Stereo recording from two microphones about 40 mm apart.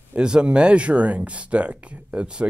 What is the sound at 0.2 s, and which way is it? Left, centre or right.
Speech, right.